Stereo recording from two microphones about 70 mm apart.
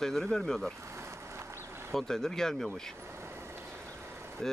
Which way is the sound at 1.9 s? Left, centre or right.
Centre.